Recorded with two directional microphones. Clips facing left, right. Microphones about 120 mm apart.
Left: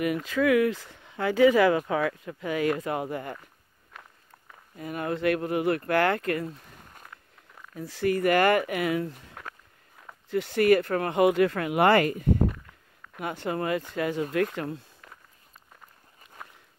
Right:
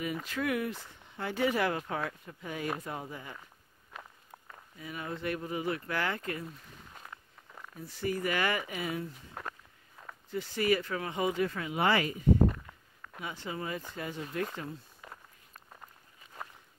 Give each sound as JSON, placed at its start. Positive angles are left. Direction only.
{"t": 0.0, "sound": "speech", "side_deg": 85}
{"t": 2.8, "sound": "speech", "side_deg": 80}
{"t": 3.9, "sound": "walk", "side_deg": 0}
{"t": 4.7, "sound": "speech", "side_deg": 55}
{"t": 7.7, "sound": "speech", "side_deg": 90}
{"t": 9.3, "sound": "walk", "side_deg": 0}
{"t": 10.3, "sound": "speech", "side_deg": 65}
{"t": 14.3, "sound": "speech", "side_deg": 70}
{"t": 15.0, "sound": "walk", "side_deg": -10}